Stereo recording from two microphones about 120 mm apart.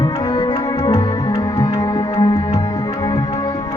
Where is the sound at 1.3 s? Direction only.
25° left (ahead or behind).